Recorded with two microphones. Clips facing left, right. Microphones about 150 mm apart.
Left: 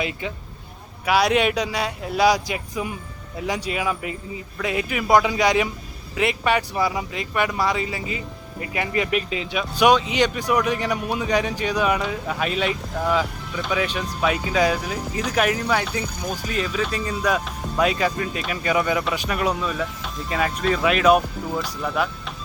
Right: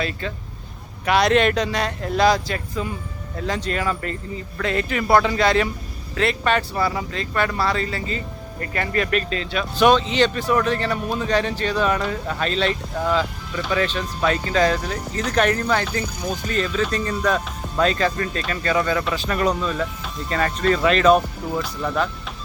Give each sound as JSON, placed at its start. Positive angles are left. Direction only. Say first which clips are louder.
{"t": 0.0, "sound": "speech", "louder": "right 1 dB", "side_deg": 15}